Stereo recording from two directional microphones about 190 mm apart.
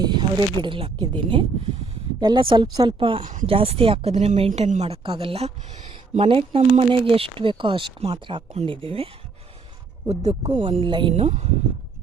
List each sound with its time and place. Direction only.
0.0 s speech: 20° right (ahead or behind)
10.4 s speech: 25° right (ahead or behind)